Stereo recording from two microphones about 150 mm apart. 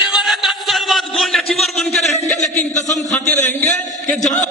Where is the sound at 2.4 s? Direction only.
50° left (ahead or behind).